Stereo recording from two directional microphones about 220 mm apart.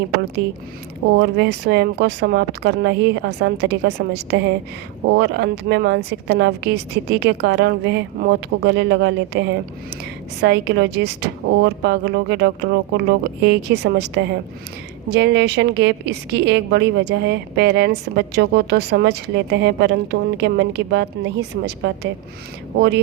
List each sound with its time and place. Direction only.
1.1 s a woman's voice: 50° right (ahead or behind)